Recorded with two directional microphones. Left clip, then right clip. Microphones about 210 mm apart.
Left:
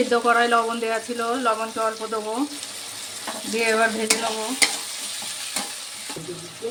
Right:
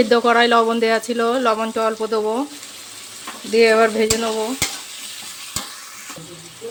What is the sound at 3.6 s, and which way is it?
Speech, 45° right (ahead or behind).